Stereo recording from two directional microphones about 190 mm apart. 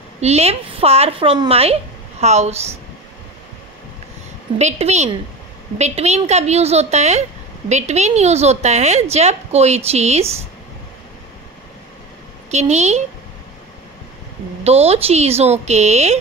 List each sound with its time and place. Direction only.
0.2 s a woman's voice: 35° right (ahead or behind)
4.6 s speech: 35° right (ahead or behind)
12.4 s speech: 35° right (ahead or behind)
14.6 s speech: 35° right (ahead or behind)